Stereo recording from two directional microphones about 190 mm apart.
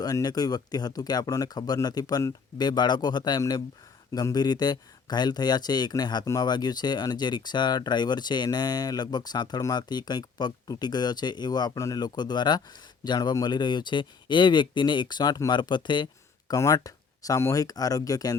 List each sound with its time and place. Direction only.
0.0 s speech: 20° left (ahead or behind)